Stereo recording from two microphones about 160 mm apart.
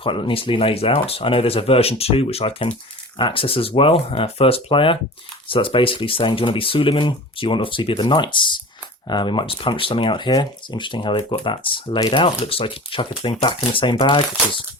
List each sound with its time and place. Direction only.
0.0 s speech: 30° left (ahead or behind)